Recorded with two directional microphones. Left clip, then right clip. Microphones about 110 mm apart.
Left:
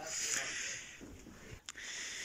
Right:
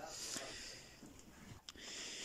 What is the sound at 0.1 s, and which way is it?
Snake, 50° right (ahead or behind).